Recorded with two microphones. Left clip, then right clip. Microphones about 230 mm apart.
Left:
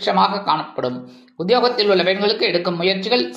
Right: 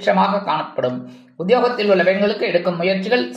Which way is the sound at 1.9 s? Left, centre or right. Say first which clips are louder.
Right 1 dB; left.